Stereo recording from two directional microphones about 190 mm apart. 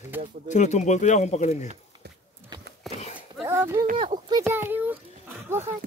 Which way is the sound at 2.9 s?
Centre (ahead or behind).